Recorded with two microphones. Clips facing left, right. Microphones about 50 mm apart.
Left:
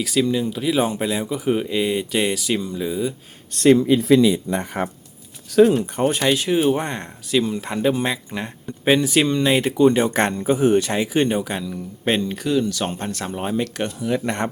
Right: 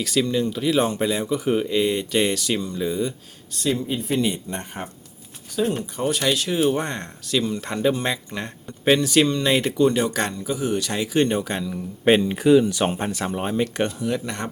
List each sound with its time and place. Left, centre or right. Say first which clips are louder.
0.0 s speech: left 2 dB; centre
3.5 s speech: left 10 dB; left
5.5 s speech: left 9 dB; left
5.8 s speech: left 4 dB; left
6.2 s speech: left 2 dB; centre
10.9 s speech: left 1 dB; centre
14.3 s speech: left 6 dB; left